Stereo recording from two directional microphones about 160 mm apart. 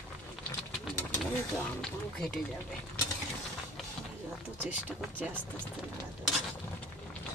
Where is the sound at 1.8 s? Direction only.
5° left (ahead or behind).